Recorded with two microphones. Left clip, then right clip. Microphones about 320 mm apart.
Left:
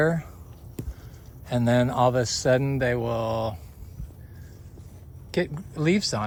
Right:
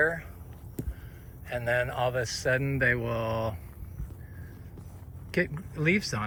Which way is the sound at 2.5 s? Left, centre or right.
Centre.